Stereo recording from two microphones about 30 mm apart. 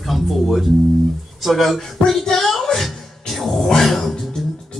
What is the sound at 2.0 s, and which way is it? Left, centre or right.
Speech, left.